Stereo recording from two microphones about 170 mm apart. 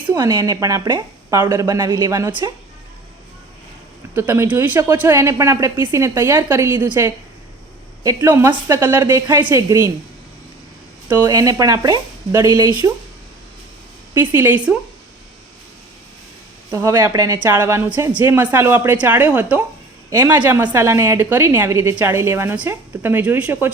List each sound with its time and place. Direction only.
0.1 s a woman's voice: 25° right (ahead or behind)
4.1 s a woman's voice: 15° right (ahead or behind)
11.1 s a woman's voice: 20° right (ahead or behind)
14.1 s a woman's voice: 10° right (ahead or behind)
16.7 s a woman's voice: 20° right (ahead or behind)